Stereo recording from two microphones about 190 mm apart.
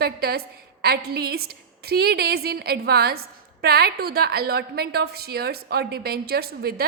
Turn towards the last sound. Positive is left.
turn(degrees=-55)  # may be behind; listen again after turning